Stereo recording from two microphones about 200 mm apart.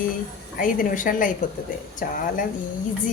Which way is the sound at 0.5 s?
45° left (ahead or behind).